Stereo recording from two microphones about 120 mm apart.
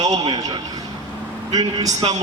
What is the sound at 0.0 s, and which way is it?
A man's voice, 35° right (ahead or behind).